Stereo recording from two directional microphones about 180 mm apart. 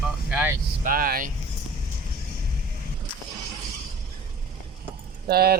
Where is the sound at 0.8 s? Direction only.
50° right (ahead or behind).